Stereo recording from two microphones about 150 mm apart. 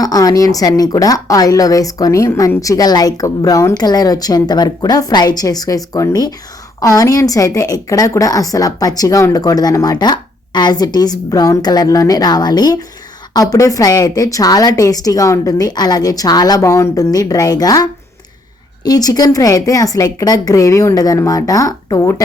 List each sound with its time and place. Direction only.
0.0 s a woman's voice: 25° left (ahead or behind)
18.9 s a woman's voice: 25° left (ahead or behind)